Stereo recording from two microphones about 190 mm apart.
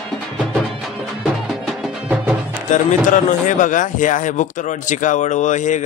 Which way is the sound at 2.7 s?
40° left (ahead or behind).